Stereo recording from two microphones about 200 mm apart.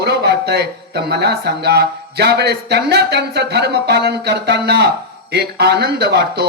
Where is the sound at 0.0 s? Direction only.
55° right (ahead or behind).